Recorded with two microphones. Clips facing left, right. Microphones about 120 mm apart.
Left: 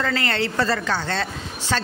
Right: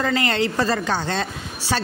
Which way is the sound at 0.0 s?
15° right (ahead or behind).